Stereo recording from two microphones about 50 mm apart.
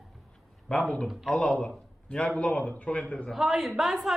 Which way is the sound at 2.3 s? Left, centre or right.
Left.